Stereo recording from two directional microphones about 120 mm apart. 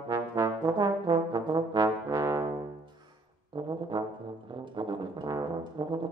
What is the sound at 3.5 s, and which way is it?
Brass instrument, 40° right (ahead or behind).